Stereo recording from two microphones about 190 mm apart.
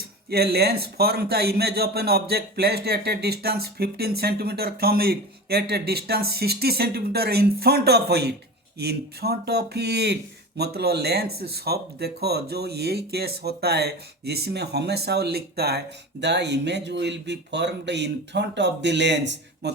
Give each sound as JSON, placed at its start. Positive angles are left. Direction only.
{"t": 0.3, "sound": "a man's voice", "side_deg": -55}